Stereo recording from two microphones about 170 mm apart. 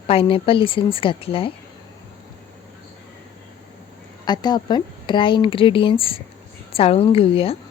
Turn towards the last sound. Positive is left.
turn(degrees=35)  # may be behind; listen again after turning